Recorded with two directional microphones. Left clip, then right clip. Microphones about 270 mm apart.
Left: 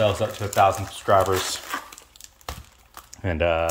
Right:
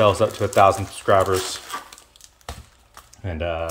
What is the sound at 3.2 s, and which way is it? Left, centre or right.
Speech, centre.